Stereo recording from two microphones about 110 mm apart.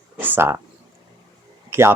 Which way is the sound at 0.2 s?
20° right (ahead or behind).